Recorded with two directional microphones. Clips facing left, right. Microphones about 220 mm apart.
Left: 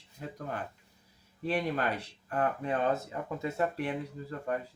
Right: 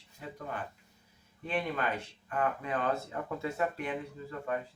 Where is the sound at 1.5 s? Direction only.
35° left (ahead or behind).